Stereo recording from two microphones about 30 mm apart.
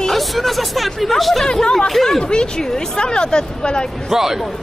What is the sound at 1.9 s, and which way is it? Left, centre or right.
Speech, centre.